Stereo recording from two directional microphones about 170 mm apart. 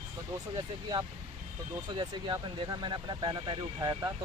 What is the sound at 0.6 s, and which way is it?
Speech, 25° right (ahead or behind).